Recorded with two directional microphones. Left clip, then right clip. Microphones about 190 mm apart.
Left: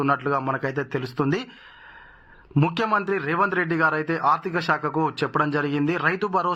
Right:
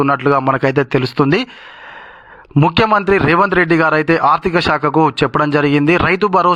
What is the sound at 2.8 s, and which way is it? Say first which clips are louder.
A man's voice: right 12 dB; 35° right (ahead or behind).